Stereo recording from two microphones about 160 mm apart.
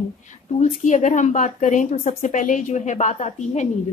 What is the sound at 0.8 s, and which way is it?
A woman's voice, 50° left (ahead or behind).